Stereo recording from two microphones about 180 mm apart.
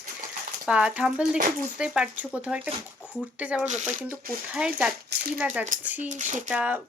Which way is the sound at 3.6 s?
40° right (ahead or behind).